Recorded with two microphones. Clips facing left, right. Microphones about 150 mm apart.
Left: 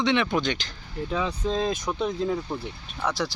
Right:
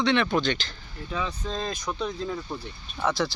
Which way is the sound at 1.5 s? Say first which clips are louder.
Left 2 dB; 15° left (ahead or behind).